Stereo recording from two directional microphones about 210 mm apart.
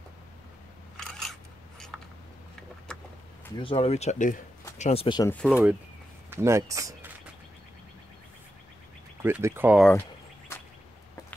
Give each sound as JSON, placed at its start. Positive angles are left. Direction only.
{"t": 0.9, "sound": "scissors", "side_deg": 0}
{"t": 1.9, "sound": "a sound", "side_deg": 0}
{"t": 3.5, "sound": "speech", "side_deg": 25}
{"t": 5.3, "sound": "speech", "side_deg": 0}
{"t": 9.2, "sound": "speech", "side_deg": -10}
{"t": 10.5, "sound": "a sound", "side_deg": 10}